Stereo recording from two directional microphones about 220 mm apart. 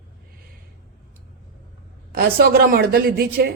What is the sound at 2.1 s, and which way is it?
A woman's voice, 45° right (ahead or behind).